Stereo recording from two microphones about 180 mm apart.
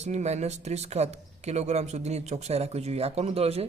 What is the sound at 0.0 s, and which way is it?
Speech, 40° right (ahead or behind).